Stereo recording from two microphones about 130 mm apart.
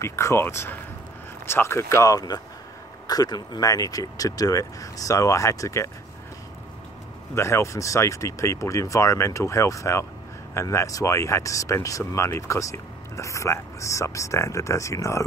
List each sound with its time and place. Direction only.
0.0 s speech: 20° left (ahead or behind)
7.3 s speech: 20° left (ahead or behind)